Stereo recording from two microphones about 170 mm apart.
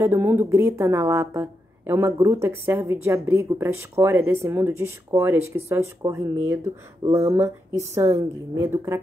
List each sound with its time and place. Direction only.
0.0 s a woman's voice: 15° right (ahead or behind)